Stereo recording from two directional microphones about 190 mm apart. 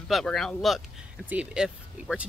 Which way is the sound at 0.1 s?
Centre (ahead or behind).